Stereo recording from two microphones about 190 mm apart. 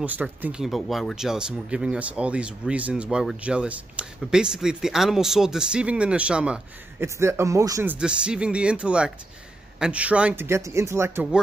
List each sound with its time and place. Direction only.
0.0 s a man's voice: 10° right (ahead or behind)